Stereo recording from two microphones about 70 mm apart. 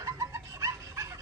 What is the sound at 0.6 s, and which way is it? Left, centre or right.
Dog, right.